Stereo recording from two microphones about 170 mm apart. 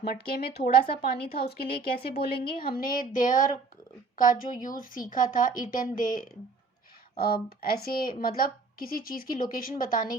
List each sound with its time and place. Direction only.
0.1 s a woman's voice: 65° left (ahead or behind)
7.2 s a woman's voice: 65° left (ahead or behind)